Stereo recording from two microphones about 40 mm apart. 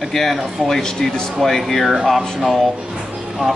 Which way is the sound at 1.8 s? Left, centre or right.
Centre.